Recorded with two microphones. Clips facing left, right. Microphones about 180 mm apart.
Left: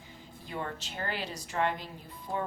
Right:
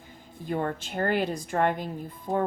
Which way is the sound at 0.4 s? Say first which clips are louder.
Right 9 dB; 50° right (ahead or behind).